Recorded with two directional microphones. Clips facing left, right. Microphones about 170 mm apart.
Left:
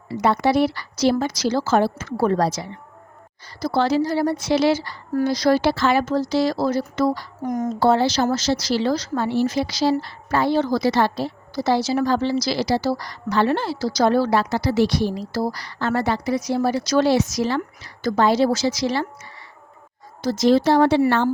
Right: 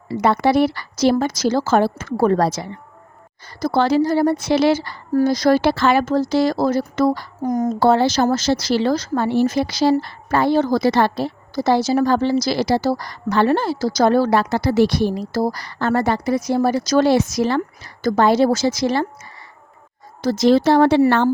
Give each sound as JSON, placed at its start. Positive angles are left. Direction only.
{"t": 0.2, "sound": "a woman's voice", "side_deg": -55}
{"t": 7.4, "sound": "speech", "side_deg": -35}
{"t": 7.8, "sound": "a woman's voice", "side_deg": -55}
{"t": 20.2, "sound": "speech", "side_deg": -65}